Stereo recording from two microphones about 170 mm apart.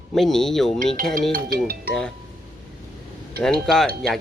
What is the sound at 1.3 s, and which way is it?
Speech, 65° right (ahead or behind).